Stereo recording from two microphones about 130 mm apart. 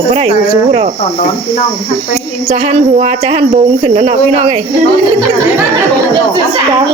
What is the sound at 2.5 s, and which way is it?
Speech, 65° right (ahead or behind).